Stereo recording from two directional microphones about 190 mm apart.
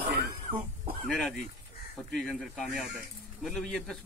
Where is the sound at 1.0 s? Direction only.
5° left (ahead or behind).